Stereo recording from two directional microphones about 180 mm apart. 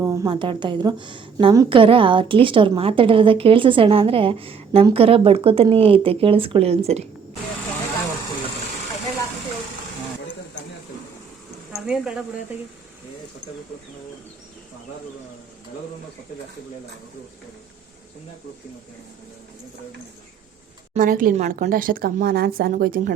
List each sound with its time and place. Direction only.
0.0 s a sound: 15° right (ahead or behind)
0.3 s a woman's voice: 25° right (ahead or behind)
11.7 s speech: 5° right (ahead or behind)
20.9 s speech: 50° right (ahead or behind)